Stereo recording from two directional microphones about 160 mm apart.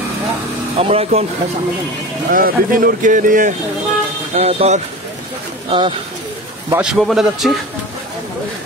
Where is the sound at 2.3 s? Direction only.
65° right (ahead or behind).